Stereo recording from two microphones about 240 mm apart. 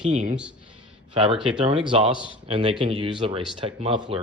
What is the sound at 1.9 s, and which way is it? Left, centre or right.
Speech, right.